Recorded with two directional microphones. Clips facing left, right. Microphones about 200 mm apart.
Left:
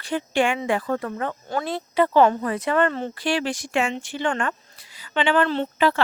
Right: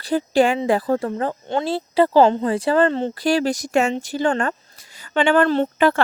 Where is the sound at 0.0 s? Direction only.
35° right (ahead or behind).